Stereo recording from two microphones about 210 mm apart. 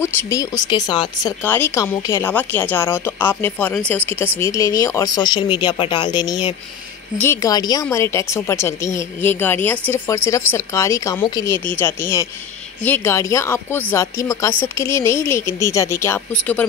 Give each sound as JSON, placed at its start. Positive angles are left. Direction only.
{"t": 0.0, "sound": "speech", "side_deg": 15}